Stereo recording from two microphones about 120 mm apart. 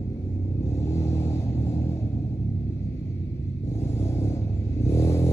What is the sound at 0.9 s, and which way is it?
Vehicle, 25° left (ahead or behind).